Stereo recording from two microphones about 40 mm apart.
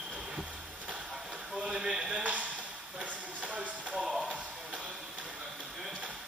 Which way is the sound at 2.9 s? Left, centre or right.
Right.